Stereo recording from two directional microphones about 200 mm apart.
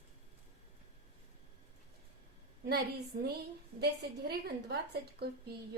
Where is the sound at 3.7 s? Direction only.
55° right (ahead or behind).